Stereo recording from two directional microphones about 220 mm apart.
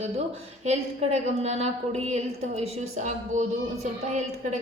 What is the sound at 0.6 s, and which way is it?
A woman's voice, 30° right (ahead or behind).